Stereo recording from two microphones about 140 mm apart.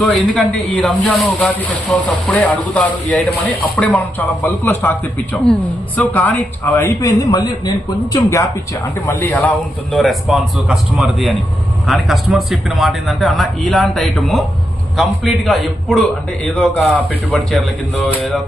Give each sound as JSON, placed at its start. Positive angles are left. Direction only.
{"t": 0.0, "sound": "a man's voice", "side_deg": 5}